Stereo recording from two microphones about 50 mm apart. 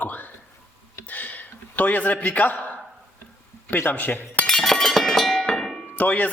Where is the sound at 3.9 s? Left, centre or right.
Left.